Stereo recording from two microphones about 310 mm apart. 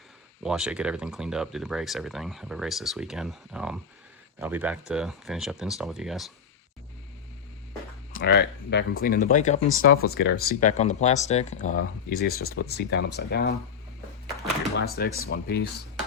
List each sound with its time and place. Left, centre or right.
0.4 s speech: centre
8.1 s speech: left
11.6 s speech: left
12.2 s speech: left
14.8 s speech: left